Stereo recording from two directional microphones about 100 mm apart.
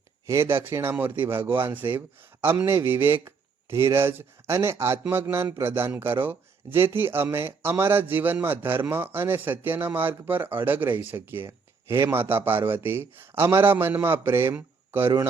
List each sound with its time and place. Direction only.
0.3 s speech: 25° right (ahead or behind)